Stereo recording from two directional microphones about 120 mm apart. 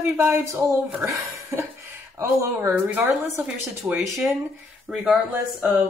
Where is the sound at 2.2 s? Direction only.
15° right (ahead or behind).